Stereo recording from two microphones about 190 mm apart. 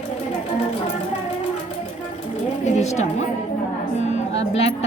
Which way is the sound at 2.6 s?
35° left (ahead or behind).